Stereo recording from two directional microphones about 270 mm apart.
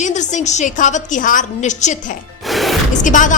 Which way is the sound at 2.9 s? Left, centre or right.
Left.